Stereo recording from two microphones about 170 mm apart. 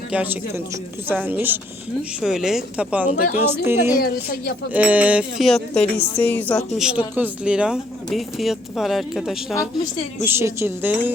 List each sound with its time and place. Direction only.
0.1 s speech: 10° right (ahead or behind)
4.0 s speech: 65° left (ahead or behind)
4.7 s speech: 10° right (ahead or behind); by 6.7 s 10° left (ahead or behind)
6.7 s speech: 5° right (ahead or behind)
10.2 s speech: 15° right (ahead or behind)